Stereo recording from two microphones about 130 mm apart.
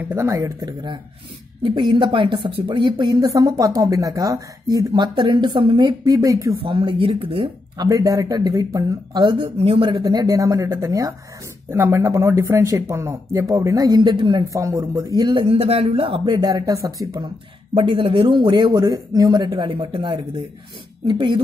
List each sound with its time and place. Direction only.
0.0 s speech: 20° right (ahead or behind)
6.6 s speech: 40° right (ahead or behind)
7.7 s speech: 30° right (ahead or behind)
9.6 s speech: 45° right (ahead or behind); by 15.3 s 30° right (ahead or behind)
15.3 s speech: 45° right (ahead or behind)